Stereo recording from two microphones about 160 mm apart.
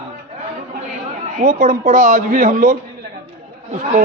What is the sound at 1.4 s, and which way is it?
A man's voice, 55° right (ahead or behind).